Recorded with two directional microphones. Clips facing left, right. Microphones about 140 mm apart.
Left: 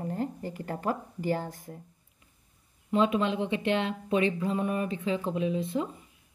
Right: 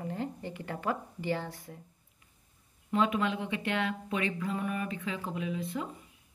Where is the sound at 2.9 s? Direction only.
25° left (ahead or behind).